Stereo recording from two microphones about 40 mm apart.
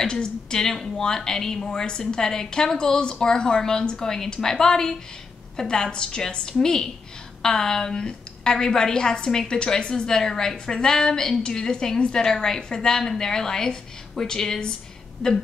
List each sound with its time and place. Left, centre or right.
0.0 s a woman's voice: left